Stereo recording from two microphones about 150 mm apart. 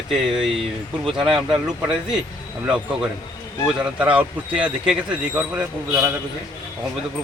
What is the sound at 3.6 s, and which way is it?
Speech, 5° right (ahead or behind).